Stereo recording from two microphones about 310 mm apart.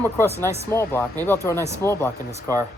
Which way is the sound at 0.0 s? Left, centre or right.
Centre.